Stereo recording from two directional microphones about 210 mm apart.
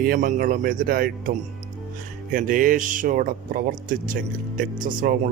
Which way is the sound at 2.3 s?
40° right (ahead or behind).